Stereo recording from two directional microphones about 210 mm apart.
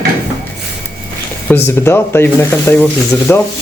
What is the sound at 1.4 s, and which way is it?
Speech, 10° left (ahead or behind).